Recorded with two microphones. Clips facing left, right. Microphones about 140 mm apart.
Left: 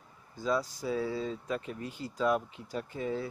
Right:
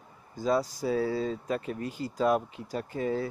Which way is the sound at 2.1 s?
40° right (ahead or behind).